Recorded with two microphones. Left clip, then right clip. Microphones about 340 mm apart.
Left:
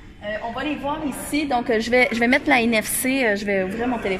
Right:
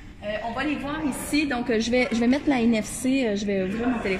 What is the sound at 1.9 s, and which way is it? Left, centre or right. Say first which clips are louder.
A woman's voice: left 7 dB; left.